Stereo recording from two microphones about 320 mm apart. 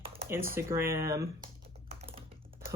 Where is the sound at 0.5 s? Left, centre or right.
Centre.